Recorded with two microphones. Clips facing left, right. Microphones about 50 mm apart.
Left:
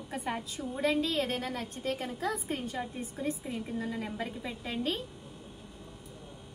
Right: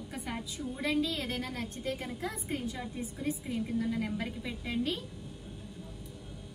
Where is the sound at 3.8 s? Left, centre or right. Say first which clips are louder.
Right 4 dB; left.